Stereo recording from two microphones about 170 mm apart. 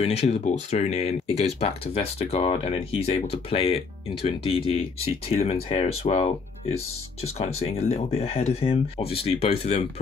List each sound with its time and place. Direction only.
0.0 s speech: 40° left (ahead or behind)